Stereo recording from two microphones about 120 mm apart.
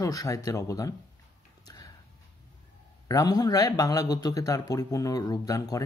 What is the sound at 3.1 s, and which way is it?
A man's voice, 30° left (ahead or behind).